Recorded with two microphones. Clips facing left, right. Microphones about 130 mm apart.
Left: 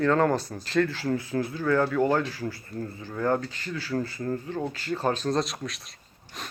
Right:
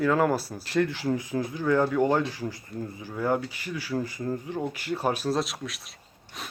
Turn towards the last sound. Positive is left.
turn(degrees=0)  # may be behind; listen again after turning